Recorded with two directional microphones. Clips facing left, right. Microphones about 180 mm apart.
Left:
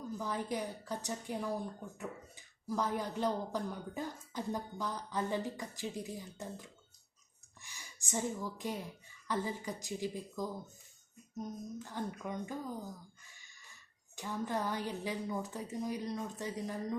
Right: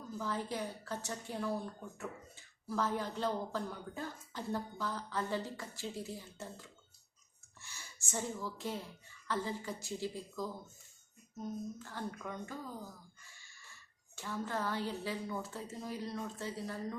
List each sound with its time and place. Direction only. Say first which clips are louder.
0.2 s a woman's voice: even; 15° left (ahead or behind)
13.3 s a sound: right 1 dB; 15° left (ahead or behind)
14.2 s a woman's voice: left 2 dB; 15° left (ahead or behind)